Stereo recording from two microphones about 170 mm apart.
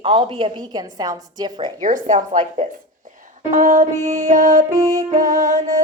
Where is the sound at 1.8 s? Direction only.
50° right (ahead or behind).